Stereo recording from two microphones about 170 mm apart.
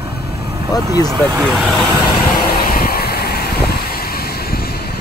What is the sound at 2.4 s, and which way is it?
Vehicle, 60° left (ahead or behind).